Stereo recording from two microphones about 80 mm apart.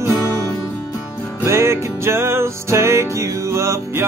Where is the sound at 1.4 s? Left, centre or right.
Right.